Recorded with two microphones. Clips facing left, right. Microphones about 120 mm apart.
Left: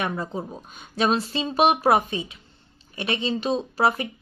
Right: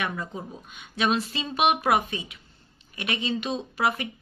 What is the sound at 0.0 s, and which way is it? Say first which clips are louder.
Speech: left 4 dB; 30° left (ahead or behind).